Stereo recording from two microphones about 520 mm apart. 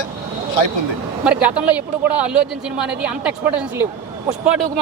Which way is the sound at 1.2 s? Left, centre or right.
Centre.